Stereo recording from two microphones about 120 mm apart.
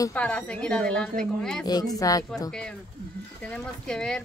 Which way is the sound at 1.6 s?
35° left (ahead or behind).